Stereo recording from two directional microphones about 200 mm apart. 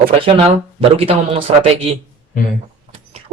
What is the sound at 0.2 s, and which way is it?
Speech, 30° right (ahead or behind).